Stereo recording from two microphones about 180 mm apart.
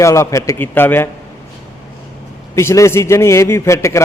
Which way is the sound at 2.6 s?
15° left (ahead or behind).